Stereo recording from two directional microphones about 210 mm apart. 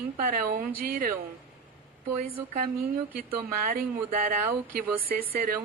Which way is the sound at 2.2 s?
45° right (ahead or behind).